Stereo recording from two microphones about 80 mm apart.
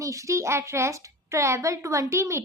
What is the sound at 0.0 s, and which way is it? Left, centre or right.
A woman's voice, right.